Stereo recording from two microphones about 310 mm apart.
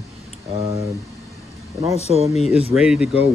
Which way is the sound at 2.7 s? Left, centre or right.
Centre.